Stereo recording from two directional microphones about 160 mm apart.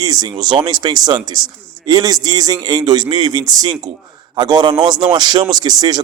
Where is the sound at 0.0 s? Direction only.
25° right (ahead or behind).